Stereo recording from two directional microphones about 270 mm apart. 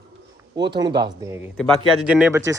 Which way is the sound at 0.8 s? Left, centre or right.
Centre.